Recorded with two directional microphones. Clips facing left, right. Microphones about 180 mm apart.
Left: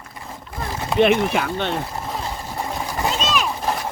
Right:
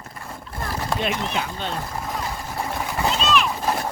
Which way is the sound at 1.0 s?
65° left (ahead or behind).